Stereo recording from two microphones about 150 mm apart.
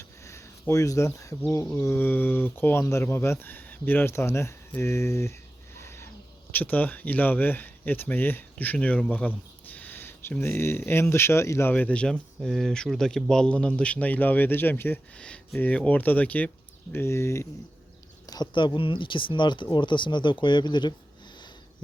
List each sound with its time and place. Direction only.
0.7 s speech: 20° left (ahead or behind)
5.7 s a sound: 15° left (ahead or behind)
6.5 s speech: 10° left (ahead or behind)
18.3 s speech: 30° left (ahead or behind)